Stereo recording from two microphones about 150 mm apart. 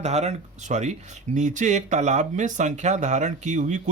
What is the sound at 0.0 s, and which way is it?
Speech, 50° right (ahead or behind).